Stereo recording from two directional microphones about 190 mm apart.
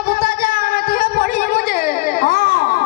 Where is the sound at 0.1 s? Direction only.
50° left (ahead or behind).